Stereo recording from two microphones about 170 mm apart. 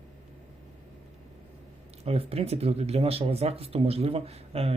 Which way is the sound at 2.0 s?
35° right (ahead or behind).